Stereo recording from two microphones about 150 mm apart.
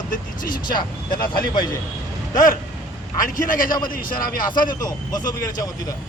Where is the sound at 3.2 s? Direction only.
65° left (ahead or behind).